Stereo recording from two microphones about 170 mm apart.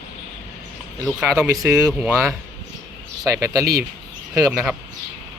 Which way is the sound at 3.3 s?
20° right (ahead or behind).